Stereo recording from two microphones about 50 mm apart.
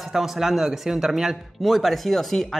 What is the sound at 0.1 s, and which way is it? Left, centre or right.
A man's voice, centre.